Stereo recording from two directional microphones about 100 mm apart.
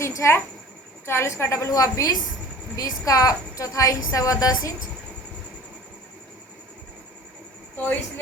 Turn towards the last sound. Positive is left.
turn(degrees=15)  # may be behind; listen again after turning